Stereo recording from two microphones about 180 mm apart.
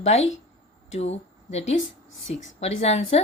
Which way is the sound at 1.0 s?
35° left (ahead or behind).